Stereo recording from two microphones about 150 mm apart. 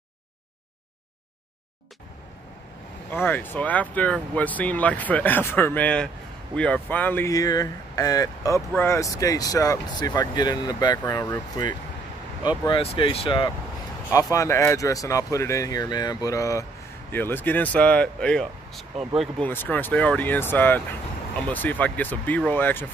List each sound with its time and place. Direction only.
3.1 s speech: 15° left (ahead or behind)
12.8 s speech: 40° left (ahead or behind)
14.1 s speech: 20° left (ahead or behind)